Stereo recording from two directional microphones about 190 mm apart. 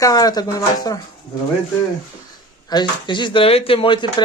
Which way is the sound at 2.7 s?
25° left (ahead or behind).